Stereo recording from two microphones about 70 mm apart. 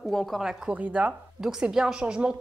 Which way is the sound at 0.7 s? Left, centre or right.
Right.